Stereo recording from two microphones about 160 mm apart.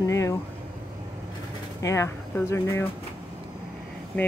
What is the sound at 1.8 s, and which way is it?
Speech, 20° left (ahead or behind).